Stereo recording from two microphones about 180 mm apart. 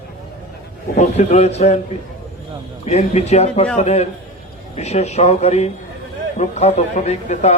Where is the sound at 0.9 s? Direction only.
40° left (ahead or behind).